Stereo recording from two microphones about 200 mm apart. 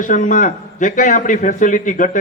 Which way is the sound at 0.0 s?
40° left (ahead or behind).